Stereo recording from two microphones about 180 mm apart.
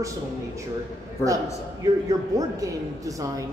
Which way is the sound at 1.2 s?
20° right (ahead or behind).